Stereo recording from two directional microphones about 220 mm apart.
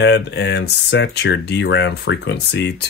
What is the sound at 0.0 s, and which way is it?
Speech, 50° left (ahead or behind).